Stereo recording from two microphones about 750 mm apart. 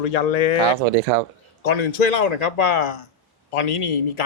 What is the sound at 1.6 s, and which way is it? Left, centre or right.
Speech, left.